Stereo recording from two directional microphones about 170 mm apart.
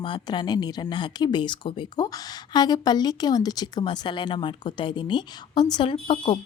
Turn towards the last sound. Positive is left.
turn(degrees=30)  # may be behind; listen again after turning